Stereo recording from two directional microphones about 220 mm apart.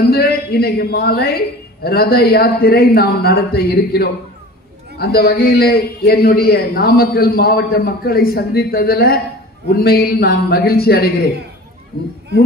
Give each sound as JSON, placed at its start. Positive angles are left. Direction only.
{"t": 0.0, "sound": "a man's voice", "side_deg": 45}